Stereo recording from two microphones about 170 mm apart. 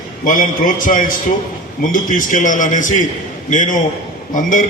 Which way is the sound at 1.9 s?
50° left (ahead or behind).